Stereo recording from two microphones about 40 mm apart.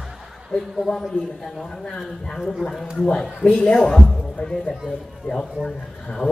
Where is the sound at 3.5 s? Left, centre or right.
Centre.